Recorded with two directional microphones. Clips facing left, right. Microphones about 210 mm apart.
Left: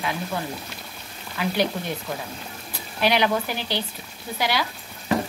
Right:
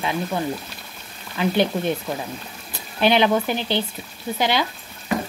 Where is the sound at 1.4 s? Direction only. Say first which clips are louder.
Right 5 dB; 25° right (ahead or behind).